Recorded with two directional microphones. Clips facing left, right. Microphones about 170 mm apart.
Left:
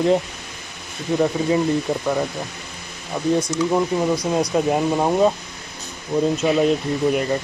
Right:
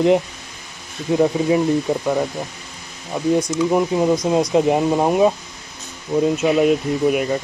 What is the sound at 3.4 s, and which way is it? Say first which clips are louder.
Speech: right 2 dB; 15° right (ahead or behind).